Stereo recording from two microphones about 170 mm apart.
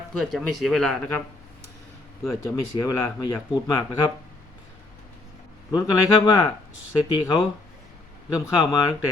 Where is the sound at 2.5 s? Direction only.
20° left (ahead or behind).